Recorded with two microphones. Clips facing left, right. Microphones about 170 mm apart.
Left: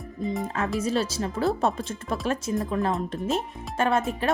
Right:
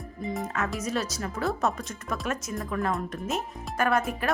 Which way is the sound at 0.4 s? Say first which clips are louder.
Left 4 dB; 30° left (ahead or behind).